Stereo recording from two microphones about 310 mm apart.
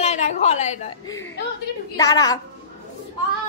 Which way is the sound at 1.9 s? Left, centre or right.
Centre.